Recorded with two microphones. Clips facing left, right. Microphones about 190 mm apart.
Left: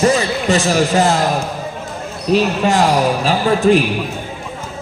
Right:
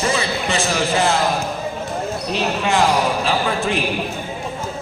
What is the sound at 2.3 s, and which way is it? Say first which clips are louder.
A man's voice: left 7 dB; 40° left (ahead or behind).